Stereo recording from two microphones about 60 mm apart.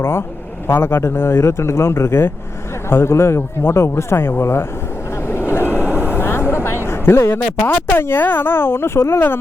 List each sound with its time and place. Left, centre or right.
0.0 s speech: left
5.3 s vehicle: left
6.5 s a sound: left
7.6 s speech: left